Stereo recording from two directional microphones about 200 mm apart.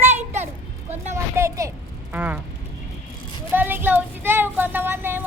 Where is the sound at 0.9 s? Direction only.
15° right (ahead or behind).